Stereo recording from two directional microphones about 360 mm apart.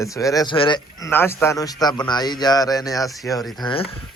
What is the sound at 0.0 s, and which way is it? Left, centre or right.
Speech, centre.